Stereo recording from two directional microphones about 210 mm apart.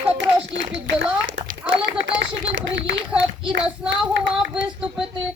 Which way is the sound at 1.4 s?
70° right (ahead or behind).